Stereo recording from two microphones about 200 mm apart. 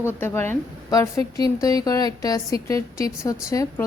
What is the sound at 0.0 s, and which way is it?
Speech, 10° left (ahead or behind).